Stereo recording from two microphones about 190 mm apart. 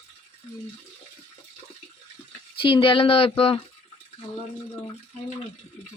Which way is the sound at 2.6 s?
25° left (ahead or behind).